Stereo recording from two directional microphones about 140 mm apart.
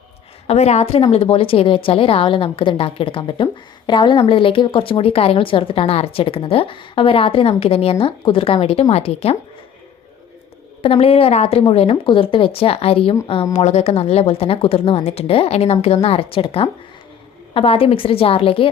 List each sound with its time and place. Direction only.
0.4 s a woman's voice: 50° left (ahead or behind)
10.8 s a woman's voice: 45° left (ahead or behind)